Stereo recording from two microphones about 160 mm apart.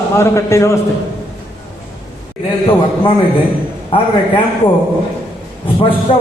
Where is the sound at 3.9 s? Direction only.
30° left (ahead or behind).